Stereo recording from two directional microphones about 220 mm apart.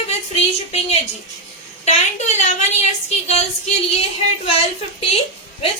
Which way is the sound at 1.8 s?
30° left (ahead or behind).